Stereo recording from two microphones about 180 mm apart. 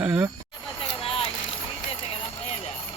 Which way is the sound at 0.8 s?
30° left (ahead or behind).